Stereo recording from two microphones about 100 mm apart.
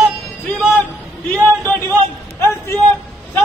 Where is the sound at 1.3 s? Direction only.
20° left (ahead or behind).